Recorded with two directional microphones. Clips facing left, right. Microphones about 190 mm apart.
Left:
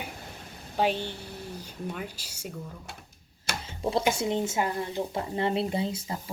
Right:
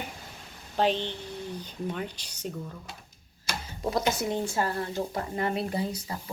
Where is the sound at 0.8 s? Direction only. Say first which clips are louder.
Right 1 dB; 10° left (ahead or behind).